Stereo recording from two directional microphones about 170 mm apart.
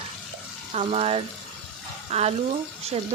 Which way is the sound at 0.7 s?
35° right (ahead or behind).